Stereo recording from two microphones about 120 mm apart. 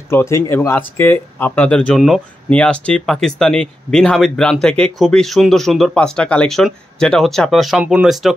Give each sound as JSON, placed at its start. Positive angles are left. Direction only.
{"t": 0.1, "sound": "speech", "side_deg": 20}
{"t": 2.0, "sound": "speech", "side_deg": 0}
{"t": 2.5, "sound": "speech", "side_deg": 10}